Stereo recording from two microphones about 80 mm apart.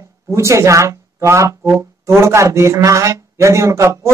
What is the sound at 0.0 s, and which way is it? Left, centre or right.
Speech, right.